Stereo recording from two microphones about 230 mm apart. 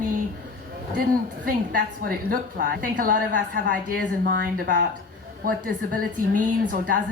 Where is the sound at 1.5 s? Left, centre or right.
Right.